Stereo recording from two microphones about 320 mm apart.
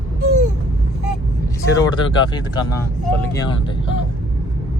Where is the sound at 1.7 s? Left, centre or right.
Centre.